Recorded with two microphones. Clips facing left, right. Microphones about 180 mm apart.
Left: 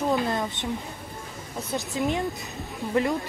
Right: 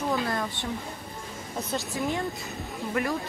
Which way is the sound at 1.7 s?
20° left (ahead or behind).